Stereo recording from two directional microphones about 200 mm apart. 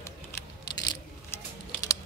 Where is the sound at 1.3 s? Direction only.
15° left (ahead or behind).